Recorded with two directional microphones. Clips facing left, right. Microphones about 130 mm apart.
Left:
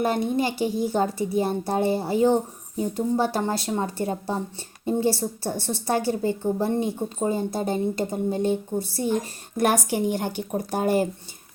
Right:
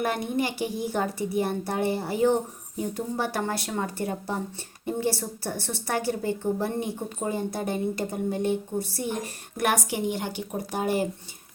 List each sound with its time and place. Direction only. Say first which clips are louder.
0.0 s a woman's voice: left 4 dB; 30° left (ahead or behind); by 11.0 s 45° left (ahead or behind)